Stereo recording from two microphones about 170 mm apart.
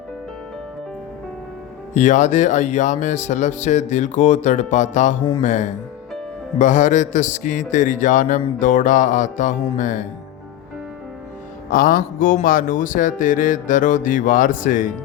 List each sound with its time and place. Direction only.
1.9 s speech: 45° left (ahead or behind)
11.7 s speech: 55° left (ahead or behind)